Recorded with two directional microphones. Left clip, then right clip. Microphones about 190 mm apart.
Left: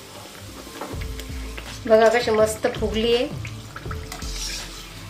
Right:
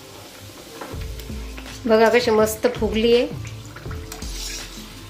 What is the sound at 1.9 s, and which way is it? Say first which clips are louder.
A woman's voice: right 1 dB; 30° right (ahead or behind).